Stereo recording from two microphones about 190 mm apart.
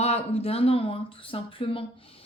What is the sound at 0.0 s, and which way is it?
Speech, 35° left (ahead or behind).